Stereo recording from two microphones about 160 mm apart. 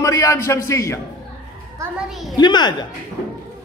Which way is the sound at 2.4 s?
25° left (ahead or behind).